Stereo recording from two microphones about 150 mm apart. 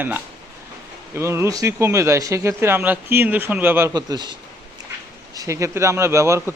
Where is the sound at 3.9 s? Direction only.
30° right (ahead or behind).